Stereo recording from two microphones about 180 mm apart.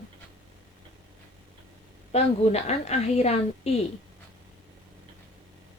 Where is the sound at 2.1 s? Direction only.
35° left (ahead or behind).